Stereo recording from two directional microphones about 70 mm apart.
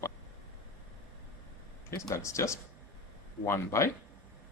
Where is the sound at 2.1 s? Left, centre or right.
Left.